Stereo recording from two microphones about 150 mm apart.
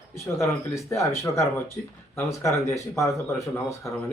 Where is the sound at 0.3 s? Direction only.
20° left (ahead or behind).